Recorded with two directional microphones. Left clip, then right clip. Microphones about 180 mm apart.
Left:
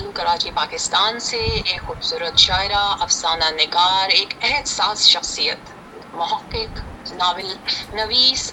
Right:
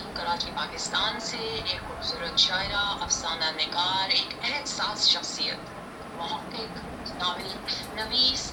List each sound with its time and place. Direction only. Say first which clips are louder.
0.1 s speech: left 10 dB; 50° left (ahead or behind)